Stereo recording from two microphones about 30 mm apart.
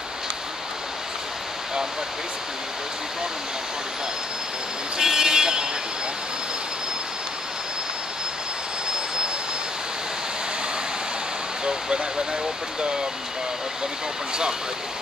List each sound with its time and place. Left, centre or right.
4.9 s speech: centre